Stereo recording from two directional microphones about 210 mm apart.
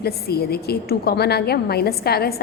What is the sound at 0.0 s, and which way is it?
A woman's voice, 50° left (ahead or behind).